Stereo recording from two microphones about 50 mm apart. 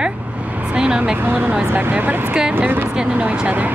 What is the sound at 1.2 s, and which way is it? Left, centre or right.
Speech, right.